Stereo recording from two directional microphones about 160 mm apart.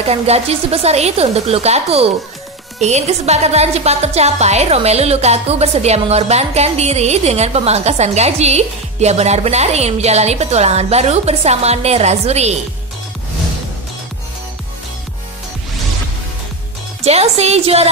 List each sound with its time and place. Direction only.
0.0 s a woman's voice: 40° right (ahead or behind)
17.0 s speech: 40° right (ahead or behind)